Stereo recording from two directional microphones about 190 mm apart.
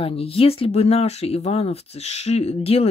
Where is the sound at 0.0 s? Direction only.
30° left (ahead or behind).